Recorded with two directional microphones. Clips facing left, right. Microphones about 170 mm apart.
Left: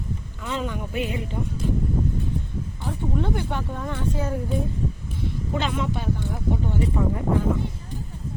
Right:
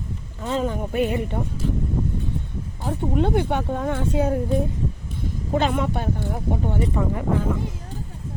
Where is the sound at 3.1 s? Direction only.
65° right (ahead or behind).